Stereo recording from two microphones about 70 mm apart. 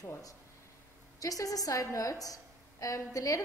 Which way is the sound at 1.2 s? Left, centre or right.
Left.